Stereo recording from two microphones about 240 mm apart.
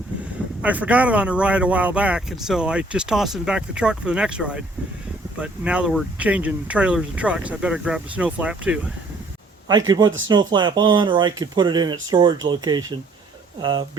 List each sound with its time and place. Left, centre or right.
0.6 s speech: centre
9.6 s speech: centre